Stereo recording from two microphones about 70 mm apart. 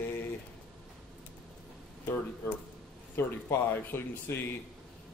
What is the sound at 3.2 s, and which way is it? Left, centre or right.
Speech, left.